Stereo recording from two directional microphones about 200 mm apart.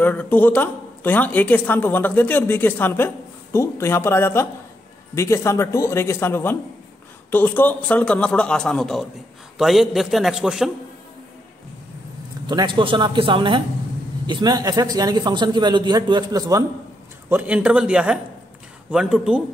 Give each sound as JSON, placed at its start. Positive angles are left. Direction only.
{"t": 0.0, "sound": "a man's voice", "side_deg": 10}
{"t": 12.4, "sound": "a man's voice", "side_deg": -20}
{"t": 17.3, "sound": "a man's voice", "side_deg": -10}